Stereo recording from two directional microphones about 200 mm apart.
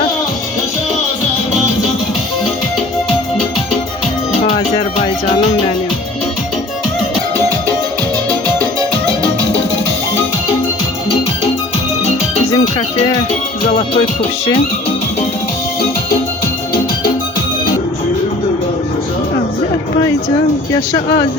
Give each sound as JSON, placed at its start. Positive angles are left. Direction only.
{"t": 4.4, "sound": "music", "side_deg": 30}
{"t": 12.5, "sound": "music", "side_deg": 20}
{"t": 20.0, "sound": "speech", "side_deg": 20}